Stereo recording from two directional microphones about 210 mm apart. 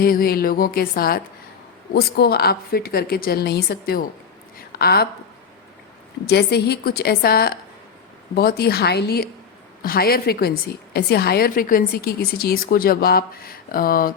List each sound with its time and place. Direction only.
0.0 s a woman's voice: 45° left (ahead or behind)
6.2 s a woman's voice: 50° left (ahead or behind)